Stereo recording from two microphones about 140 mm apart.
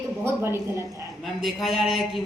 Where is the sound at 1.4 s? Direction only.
Centre (ahead or behind).